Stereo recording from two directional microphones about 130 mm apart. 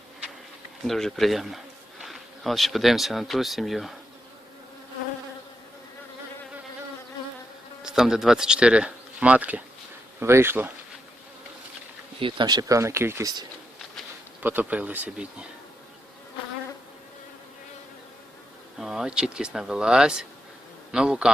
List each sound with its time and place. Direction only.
0.9 s speech: 5° left (ahead or behind)
7.8 s speech: 5° right (ahead or behind)
12.2 s speech: 35° right (ahead or behind); by 13.3 s 20° right (ahead or behind)
14.4 s speech: 15° right (ahead or behind)
18.8 s speech: 5° right (ahead or behind)